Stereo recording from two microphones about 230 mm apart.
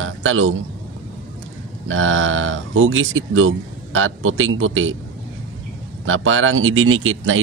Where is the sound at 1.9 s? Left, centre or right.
Right.